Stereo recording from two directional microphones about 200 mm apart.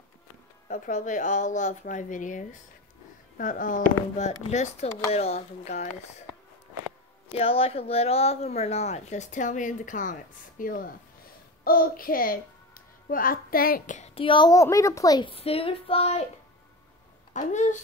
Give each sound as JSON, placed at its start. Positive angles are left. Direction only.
{"t": 0.7, "sound": "speech", "side_deg": 40}
{"t": 7.3, "sound": "a child's voice", "side_deg": 30}
{"t": 17.3, "sound": "speech", "side_deg": 40}